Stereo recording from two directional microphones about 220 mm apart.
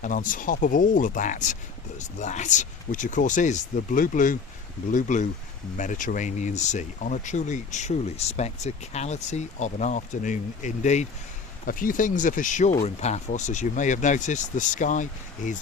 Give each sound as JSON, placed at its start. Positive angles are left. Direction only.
{"t": 0.0, "sound": "speech", "side_deg": 35}